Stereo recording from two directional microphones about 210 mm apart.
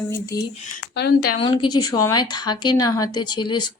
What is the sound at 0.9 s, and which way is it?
Speech, 50° left (ahead or behind).